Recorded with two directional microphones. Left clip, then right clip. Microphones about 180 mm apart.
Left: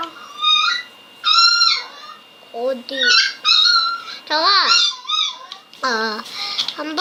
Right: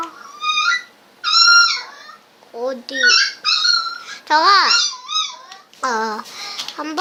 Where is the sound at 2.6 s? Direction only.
50° right (ahead or behind).